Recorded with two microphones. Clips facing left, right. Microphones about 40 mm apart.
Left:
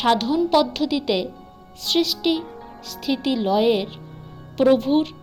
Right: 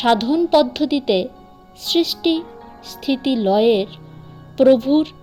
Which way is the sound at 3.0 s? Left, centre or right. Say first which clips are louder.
Right 4 dB; right.